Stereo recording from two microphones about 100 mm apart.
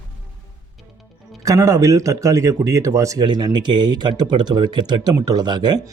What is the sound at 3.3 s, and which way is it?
Speech, 45° right (ahead or behind).